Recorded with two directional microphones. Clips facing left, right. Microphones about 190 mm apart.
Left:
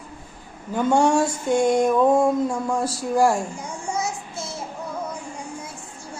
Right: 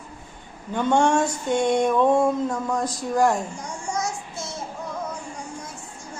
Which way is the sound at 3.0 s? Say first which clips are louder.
Left 2 dB; 10° left (ahead or behind).